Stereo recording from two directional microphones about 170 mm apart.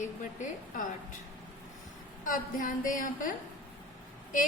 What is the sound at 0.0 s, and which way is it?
Speech, 50° left (ahead or behind).